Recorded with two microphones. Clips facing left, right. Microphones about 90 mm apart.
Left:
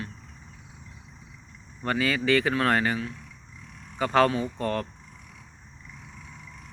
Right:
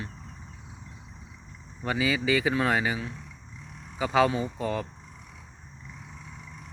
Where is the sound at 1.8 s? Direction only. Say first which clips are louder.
Left 1 dB; 10° right (ahead or behind).